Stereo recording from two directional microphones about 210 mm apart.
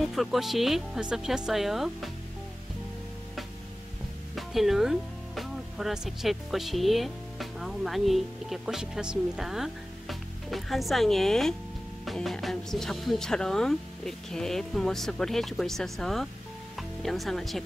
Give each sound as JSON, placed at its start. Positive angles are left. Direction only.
{"t": 0.0, "sound": "speech", "side_deg": 0}
{"t": 4.4, "sound": "speech", "side_deg": 0}